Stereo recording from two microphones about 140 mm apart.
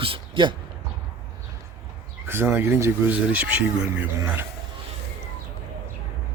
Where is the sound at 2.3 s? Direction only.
15° right (ahead or behind).